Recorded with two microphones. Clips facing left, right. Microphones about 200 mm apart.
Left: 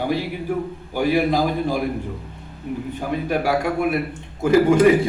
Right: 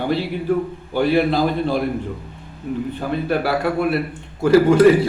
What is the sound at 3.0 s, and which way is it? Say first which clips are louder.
A man's voice: right 1 dB; 10° left (ahead or behind).